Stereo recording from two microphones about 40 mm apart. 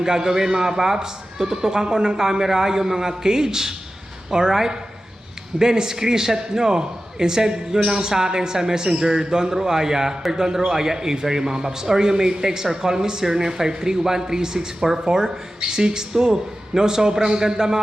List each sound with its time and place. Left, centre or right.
0.0 s a man's voice: centre